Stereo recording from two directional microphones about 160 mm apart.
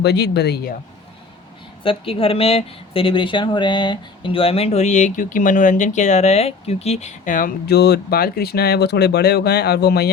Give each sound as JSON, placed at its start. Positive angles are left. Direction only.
{"t": 0.0, "sound": "speech", "side_deg": 90}
{"t": 1.8, "sound": "speech", "side_deg": 35}